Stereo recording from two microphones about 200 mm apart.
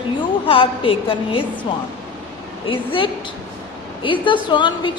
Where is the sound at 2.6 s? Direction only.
25° left (ahead or behind).